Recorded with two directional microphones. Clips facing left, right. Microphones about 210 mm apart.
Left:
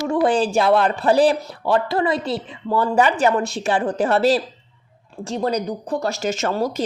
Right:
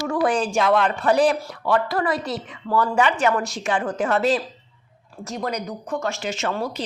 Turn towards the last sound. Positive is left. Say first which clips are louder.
# left 4 dB
turn(degrees=40)  # may be behind; listen again after turning